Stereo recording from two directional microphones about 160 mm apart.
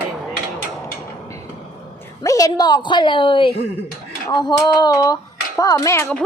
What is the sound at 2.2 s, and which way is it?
A woman's voice, 20° left (ahead or behind).